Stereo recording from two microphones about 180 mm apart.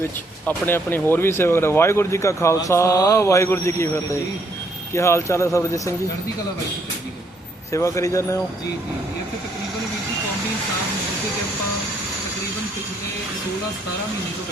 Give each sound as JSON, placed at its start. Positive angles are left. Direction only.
{"t": 0.4, "sound": "speech", "side_deg": 10}
{"t": 7.7, "sound": "speech", "side_deg": 15}